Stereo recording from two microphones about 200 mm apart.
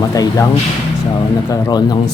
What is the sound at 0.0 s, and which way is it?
Speech, 20° left (ahead or behind).